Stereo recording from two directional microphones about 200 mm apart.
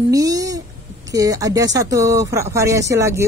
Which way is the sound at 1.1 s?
15° right (ahead or behind).